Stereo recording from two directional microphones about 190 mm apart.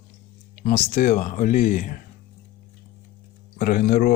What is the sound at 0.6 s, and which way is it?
Speech, 50° left (ahead or behind).